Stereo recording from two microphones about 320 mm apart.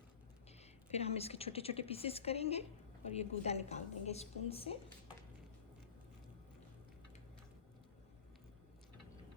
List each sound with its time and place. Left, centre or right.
0.6 s a woman's voice: centre